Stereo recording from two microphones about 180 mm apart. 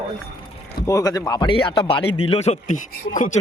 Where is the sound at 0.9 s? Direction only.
20° left (ahead or behind); by 2.8 s 40° left (ahead or behind).